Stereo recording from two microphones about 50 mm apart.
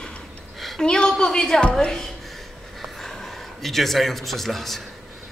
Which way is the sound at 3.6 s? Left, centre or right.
Centre.